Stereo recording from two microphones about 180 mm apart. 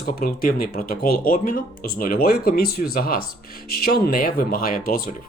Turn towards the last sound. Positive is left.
turn(degrees=55)  # may be behind; listen again after turning